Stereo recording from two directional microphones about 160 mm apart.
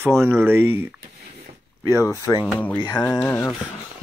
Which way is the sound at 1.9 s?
20° left (ahead or behind).